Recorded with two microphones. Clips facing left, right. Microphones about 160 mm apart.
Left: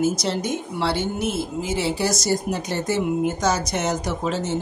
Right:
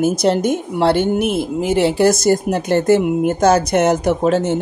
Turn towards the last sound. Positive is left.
turn(degrees=-55)  # may be behind; listen again after turning